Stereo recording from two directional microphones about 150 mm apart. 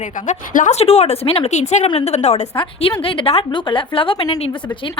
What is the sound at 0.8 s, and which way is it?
A woman's voice, 45° left (ahead or behind).